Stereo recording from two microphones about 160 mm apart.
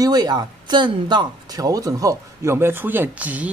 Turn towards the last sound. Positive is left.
turn(degrees=-10)  # may be behind; listen again after turning